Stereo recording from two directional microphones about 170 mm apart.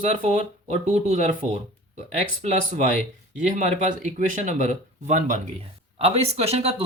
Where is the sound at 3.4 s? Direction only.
45° right (ahead or behind).